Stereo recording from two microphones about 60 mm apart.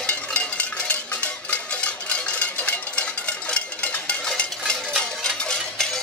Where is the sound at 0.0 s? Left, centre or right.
Left.